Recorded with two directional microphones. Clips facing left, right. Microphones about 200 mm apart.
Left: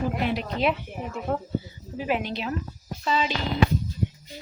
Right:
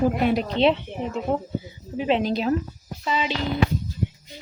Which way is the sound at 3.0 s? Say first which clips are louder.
Even; 15° right (ahead or behind).